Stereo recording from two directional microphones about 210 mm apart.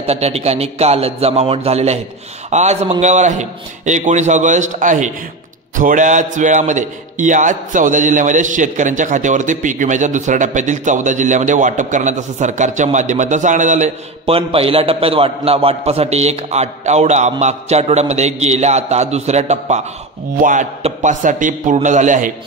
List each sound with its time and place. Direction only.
0.0 s a man's voice: 30° right (ahead or behind)